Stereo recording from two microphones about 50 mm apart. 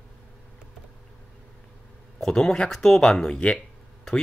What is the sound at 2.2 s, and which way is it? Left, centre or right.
Speech, centre.